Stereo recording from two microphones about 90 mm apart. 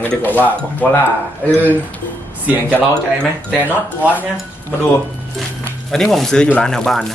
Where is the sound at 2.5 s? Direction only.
20° right (ahead or behind).